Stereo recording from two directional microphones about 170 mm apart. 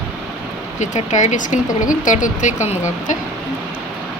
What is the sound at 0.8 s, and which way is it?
Speech, 45° left (ahead or behind).